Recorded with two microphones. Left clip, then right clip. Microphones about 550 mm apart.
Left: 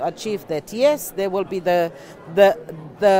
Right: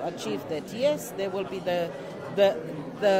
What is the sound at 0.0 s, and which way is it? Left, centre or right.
Speech, left.